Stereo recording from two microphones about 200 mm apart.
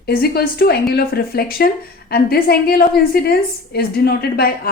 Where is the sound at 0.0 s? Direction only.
50° left (ahead or behind).